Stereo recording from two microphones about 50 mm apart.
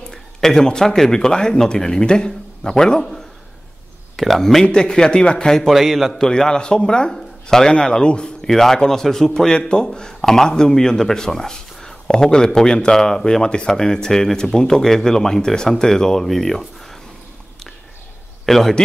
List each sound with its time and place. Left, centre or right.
0.1 s speech: centre
4.2 s a man's voice: centre
5.7 s a man's voice: centre
6.1 s speech: centre
8.5 s a man's voice: centre
18.4 s a man's voice: centre